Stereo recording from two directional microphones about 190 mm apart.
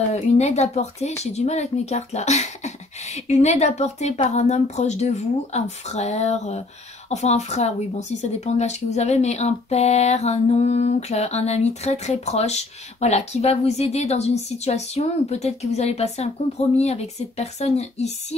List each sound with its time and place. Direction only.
0.1 s speech: 35° left (ahead or behind)